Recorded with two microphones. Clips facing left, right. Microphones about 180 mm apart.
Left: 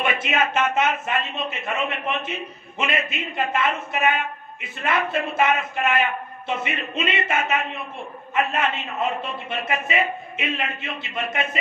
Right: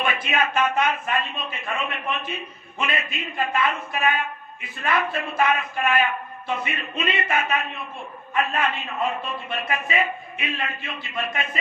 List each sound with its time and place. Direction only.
0.0 s speech: 25° left (ahead or behind)